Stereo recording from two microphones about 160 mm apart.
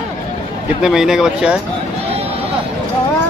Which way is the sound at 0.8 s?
5° right (ahead or behind).